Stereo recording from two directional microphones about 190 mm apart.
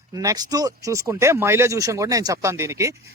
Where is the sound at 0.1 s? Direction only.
20° right (ahead or behind).